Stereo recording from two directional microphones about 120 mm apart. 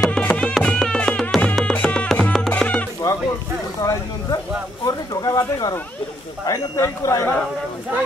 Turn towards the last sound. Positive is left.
turn(degrees=25)  # may be behind; listen again after turning